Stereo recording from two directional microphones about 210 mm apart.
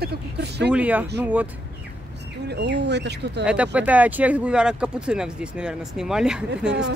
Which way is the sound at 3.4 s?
5° right (ahead or behind).